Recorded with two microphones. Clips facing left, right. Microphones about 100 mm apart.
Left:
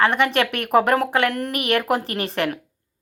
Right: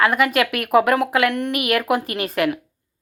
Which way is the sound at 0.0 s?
30° left (ahead or behind).